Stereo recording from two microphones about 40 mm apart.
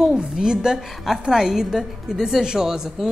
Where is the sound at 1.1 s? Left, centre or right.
Centre.